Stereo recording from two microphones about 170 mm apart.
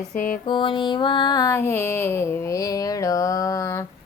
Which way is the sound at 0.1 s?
55° left (ahead or behind).